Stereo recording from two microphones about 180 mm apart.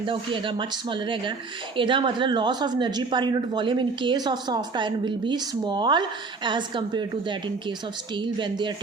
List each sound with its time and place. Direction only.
0.0 s speech: 30° right (ahead or behind)